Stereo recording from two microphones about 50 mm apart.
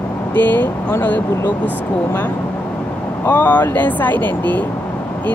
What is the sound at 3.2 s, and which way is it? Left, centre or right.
Speech, left.